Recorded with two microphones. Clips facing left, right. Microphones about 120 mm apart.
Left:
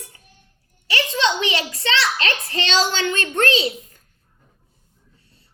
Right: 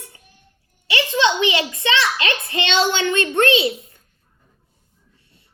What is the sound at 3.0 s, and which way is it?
A woman's voice, 20° right (ahead or behind).